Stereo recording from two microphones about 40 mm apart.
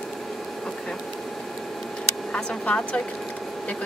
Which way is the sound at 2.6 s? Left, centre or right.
Left.